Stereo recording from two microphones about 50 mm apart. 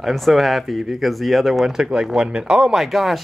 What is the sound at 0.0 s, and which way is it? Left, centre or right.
Speech, centre.